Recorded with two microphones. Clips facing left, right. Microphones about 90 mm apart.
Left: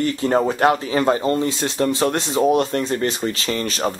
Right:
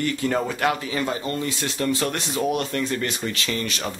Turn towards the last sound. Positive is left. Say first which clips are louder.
# left 5 dB
turn(degrees=35)  # may be behind; listen again after turning